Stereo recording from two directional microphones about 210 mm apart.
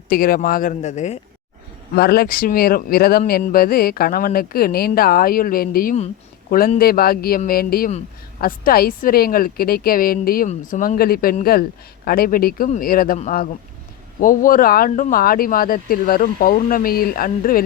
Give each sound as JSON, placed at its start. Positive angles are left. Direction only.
{"t": 0.1, "sound": "speech", "side_deg": 45}
{"t": 2.0, "sound": "a man's voice", "side_deg": 50}